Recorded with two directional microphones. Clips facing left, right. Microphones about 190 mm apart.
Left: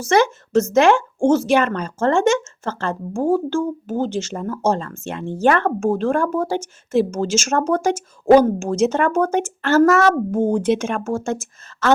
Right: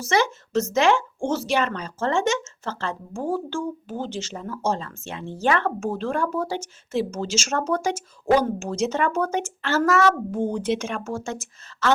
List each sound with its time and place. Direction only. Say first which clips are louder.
0.0 s a woman's voice: left 6 dB; 50° left (ahead or behind)